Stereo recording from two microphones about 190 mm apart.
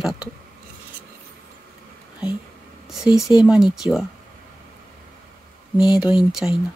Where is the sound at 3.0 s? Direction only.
5° right (ahead or behind).